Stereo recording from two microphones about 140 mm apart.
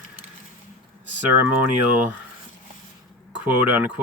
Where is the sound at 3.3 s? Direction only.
10° right (ahead or behind).